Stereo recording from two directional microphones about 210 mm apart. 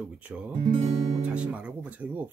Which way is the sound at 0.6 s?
25° right (ahead or behind).